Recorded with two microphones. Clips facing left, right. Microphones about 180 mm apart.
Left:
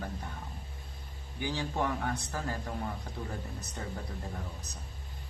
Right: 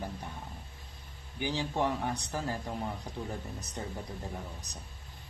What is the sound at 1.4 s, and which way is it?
Speech, 20° right (ahead or behind).